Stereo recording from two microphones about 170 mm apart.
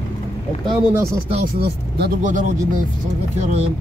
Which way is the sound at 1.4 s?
70° right (ahead or behind).